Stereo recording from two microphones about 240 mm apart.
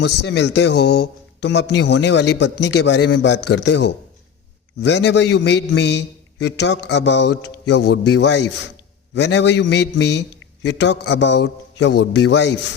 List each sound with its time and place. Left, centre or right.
0.0 s speech: left